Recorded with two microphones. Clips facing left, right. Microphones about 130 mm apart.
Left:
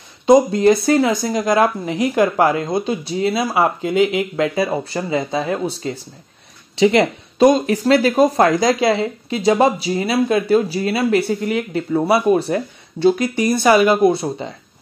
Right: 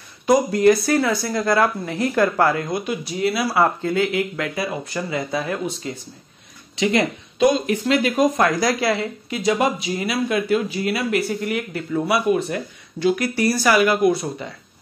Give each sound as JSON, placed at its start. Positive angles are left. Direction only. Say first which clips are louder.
{"t": 0.3, "sound": "speech", "louder": "left 3 dB", "side_deg": 25}
{"t": 7.4, "sound": "speech", "louder": "left 5 dB", "side_deg": 40}
{"t": 13.3, "sound": "speech", "louder": "left 4 dB", "side_deg": 20}